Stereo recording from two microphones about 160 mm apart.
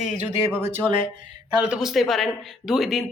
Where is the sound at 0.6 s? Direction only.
15° right (ahead or behind).